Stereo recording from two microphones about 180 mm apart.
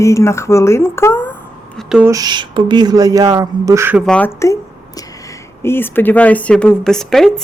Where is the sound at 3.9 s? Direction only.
5° left (ahead or behind).